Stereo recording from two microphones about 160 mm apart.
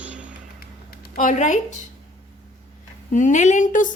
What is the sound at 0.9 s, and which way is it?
Speech, 70° left (ahead or behind).